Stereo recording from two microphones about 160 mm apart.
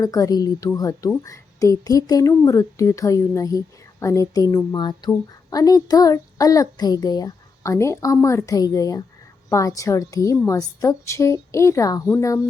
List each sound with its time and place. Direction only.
0.0 s a child's voice: 20° left (ahead or behind)